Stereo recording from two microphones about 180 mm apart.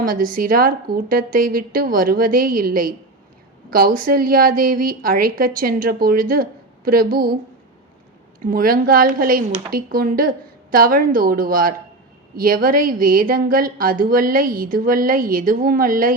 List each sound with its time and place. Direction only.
0.0 s speech: 50° right (ahead or behind)
8.4 s speech: 55° right (ahead or behind)